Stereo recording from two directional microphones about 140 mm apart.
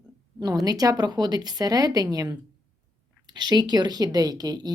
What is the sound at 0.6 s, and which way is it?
Speech, 25° right (ahead or behind).